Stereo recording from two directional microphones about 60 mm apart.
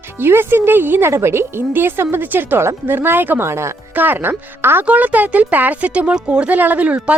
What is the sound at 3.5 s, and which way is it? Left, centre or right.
Speech, right.